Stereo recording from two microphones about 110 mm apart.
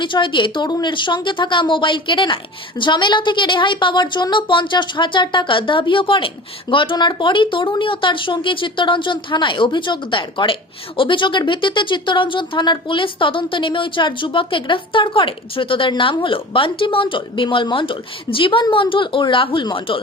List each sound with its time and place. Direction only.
0.0 s speech: 45° left (ahead or behind)